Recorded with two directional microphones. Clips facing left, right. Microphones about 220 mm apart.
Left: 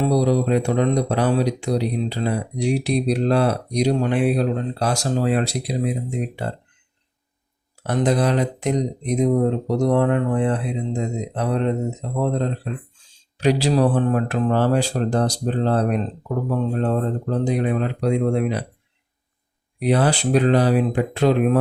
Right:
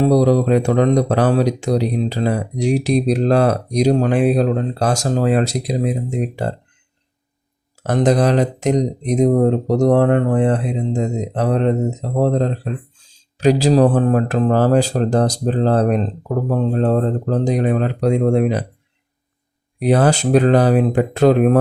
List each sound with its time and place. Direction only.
0.0 s speech: 45° right (ahead or behind)
7.9 s speech: 40° right (ahead or behind)
19.8 s speech: 45° right (ahead or behind)